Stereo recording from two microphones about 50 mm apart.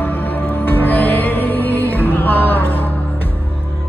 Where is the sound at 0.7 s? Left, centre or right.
Left.